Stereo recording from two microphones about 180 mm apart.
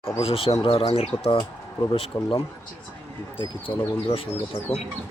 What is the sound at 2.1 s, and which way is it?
Speech, 15° left (ahead or behind).